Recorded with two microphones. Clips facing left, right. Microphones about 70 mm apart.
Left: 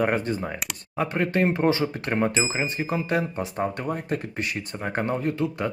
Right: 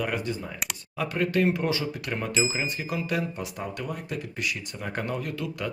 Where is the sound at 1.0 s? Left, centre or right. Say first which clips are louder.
Left 2 dB; left.